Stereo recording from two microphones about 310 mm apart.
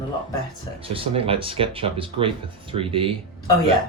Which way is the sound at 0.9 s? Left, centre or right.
Centre.